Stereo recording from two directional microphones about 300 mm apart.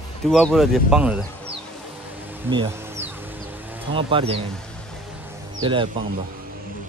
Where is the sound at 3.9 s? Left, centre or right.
Centre.